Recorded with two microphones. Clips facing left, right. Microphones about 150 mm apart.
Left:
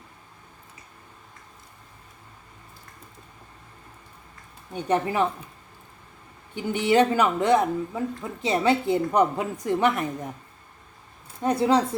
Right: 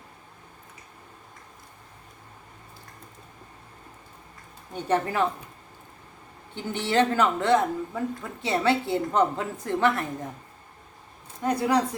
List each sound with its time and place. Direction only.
4.7 s speech: 15° left (ahead or behind)
6.5 s speech: 15° left (ahead or behind)
11.4 s a woman's voice: 25° left (ahead or behind)